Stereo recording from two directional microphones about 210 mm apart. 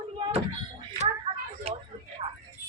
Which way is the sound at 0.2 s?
30° right (ahead or behind).